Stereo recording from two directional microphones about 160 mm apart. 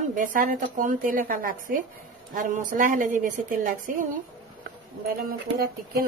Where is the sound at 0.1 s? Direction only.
55° right (ahead or behind).